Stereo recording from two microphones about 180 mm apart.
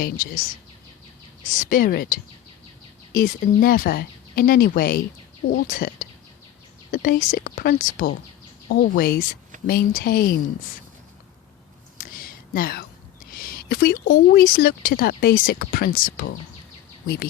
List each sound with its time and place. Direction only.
0.0 s speech: 50° left (ahead or behind)
11.9 s a sound: 55° left (ahead or behind)
14.1 s speech: 55° left (ahead or behind)